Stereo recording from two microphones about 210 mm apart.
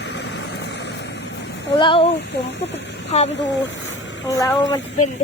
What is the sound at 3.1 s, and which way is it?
Speech, 30° left (ahead or behind).